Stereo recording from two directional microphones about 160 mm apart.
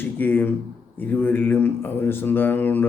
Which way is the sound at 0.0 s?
10° left (ahead or behind).